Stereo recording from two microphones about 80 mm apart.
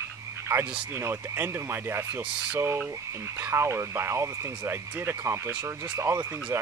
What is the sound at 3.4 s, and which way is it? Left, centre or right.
Speech, right.